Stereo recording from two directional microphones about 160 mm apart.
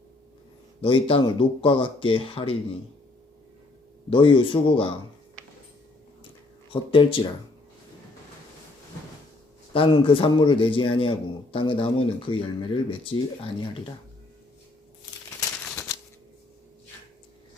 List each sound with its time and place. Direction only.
0.8 s a man's voice: 35° left (ahead or behind)
4.1 s a man's voice: 30° left (ahead or behind)
6.9 s a man's voice: 30° left (ahead or behind)
9.7 s a man's voice: 30° left (ahead or behind)